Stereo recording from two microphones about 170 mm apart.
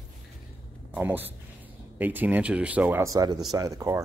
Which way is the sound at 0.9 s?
10° right (ahead or behind).